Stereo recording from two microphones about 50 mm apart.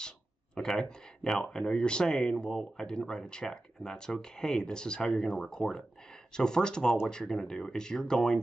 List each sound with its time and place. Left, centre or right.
0.6 s speech: centre